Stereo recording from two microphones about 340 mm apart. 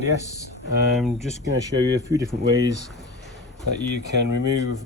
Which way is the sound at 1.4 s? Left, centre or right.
Right.